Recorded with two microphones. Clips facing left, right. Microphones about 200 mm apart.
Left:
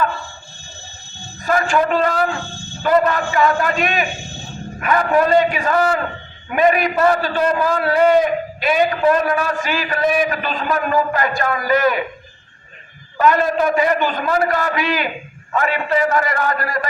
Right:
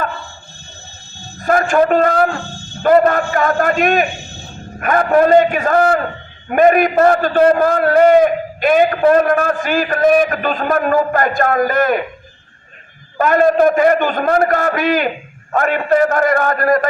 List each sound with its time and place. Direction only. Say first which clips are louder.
1.5 s a man's voice: right 4 dB; 50° right (ahead or behind)
13.1 s a man's voice: right 4 dB; 50° right (ahead or behind)